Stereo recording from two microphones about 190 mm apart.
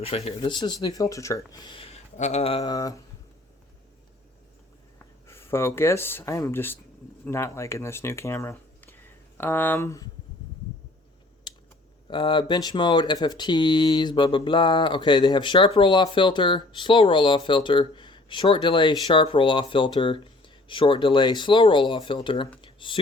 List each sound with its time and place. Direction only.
0.0 s speech: 30° left (ahead or behind)
4.9 s speech: 15° left (ahead or behind)
11.5 s typing: 25° left (ahead or behind)
12.0 s speech: 25° left (ahead or behind)
22.6 s computer keyboard: 25° left (ahead or behind)